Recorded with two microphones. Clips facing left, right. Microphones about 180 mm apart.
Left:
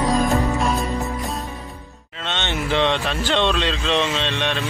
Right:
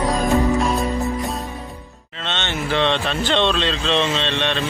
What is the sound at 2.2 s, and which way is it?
Speech, 15° left (ahead or behind).